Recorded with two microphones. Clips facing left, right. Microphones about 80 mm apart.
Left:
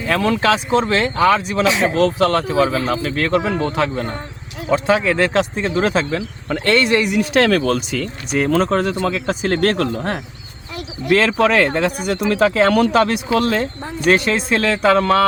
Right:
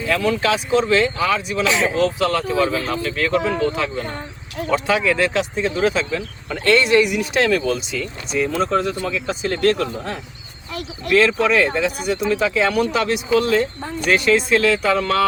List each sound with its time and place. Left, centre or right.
0.1 s speech: left
1.6 s speech: left
2.0 s speech: left
2.5 s speech: left
3.0 s speech: left
7.4 s speech: left
11.5 s speech: left